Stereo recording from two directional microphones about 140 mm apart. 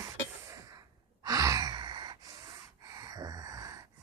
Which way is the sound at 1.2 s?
25° right (ahead or behind).